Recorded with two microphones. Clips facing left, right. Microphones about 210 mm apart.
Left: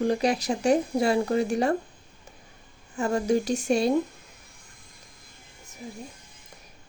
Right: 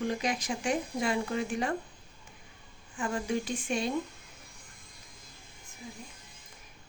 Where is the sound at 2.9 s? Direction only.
40° left (ahead or behind).